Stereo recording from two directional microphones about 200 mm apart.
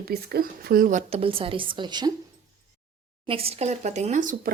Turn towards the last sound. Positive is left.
turn(degrees=-40)  # may be behind; listen again after turning